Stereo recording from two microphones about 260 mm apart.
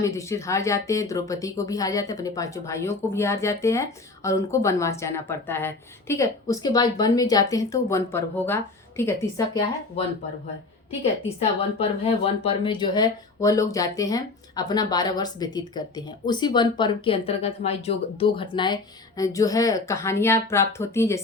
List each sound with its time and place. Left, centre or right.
0.0 s speech: centre
11.8 s speech: left